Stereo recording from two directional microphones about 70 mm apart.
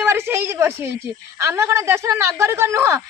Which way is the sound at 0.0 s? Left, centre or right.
Right.